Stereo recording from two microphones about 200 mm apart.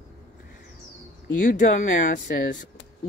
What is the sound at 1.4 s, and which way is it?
Speech, 40° left (ahead or behind).